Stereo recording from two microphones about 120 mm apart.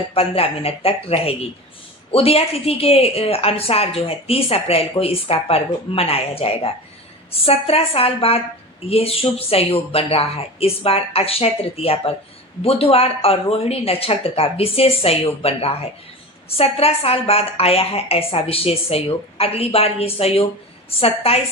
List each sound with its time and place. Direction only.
0.1 s a woman's voice: 55° left (ahead or behind)